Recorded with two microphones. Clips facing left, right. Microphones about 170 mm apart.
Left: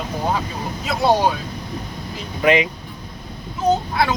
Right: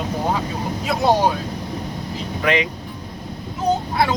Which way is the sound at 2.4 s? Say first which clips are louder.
Left 4 dB; 10° left (ahead or behind).